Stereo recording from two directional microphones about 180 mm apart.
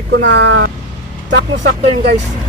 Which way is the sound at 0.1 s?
85° right.